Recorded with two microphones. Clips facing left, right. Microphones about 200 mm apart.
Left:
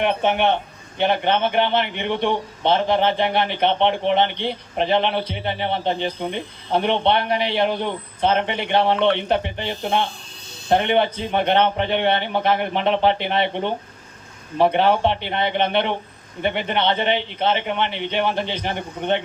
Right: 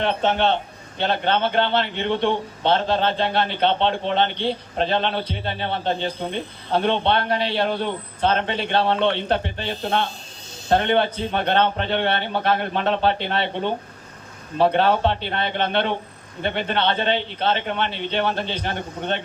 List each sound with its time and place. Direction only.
0.0 s a man's voice: 15° left (ahead or behind)